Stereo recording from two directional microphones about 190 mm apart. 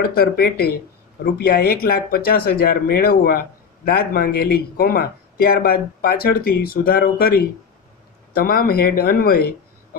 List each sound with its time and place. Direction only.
0.0 s speech: 55° left (ahead or behind)